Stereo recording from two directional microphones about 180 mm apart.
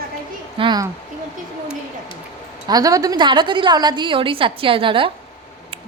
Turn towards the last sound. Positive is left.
turn(degrees=-30)  # may be behind; listen again after turning